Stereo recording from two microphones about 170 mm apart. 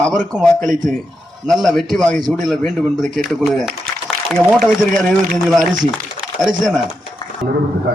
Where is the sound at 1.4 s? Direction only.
Centre (ahead or behind).